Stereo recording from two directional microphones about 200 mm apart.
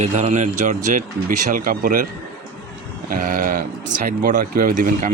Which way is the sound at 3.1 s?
45° right (ahead or behind).